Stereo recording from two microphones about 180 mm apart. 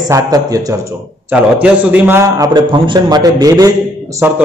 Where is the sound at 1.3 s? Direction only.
10° right (ahead or behind).